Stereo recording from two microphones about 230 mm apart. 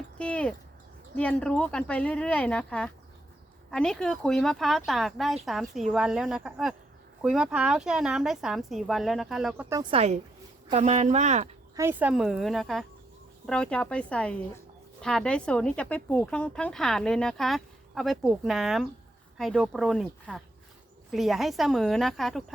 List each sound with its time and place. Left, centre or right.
0.2 s a sound: centre
1.1 s speech: centre; by 11.4 s right
11.8 s speech: centre